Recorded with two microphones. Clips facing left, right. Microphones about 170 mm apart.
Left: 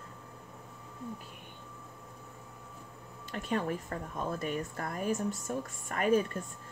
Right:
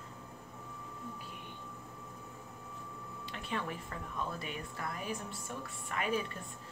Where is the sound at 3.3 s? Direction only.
45° left (ahead or behind).